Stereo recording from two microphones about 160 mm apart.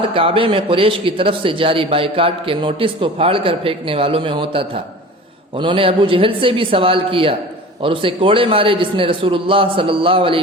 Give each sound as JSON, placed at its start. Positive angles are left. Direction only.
{"t": 0.1, "sound": "a man's voice", "side_deg": -35}